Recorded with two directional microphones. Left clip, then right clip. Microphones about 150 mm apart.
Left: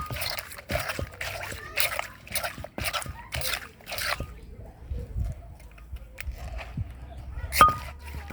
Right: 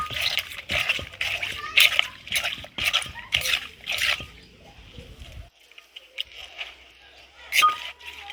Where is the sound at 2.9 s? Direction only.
15° left (ahead or behind).